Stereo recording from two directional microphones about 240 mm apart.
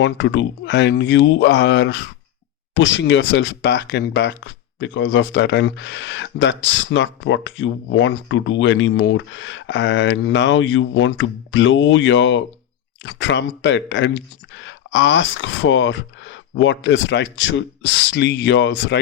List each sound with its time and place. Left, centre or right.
0.0 s speech: left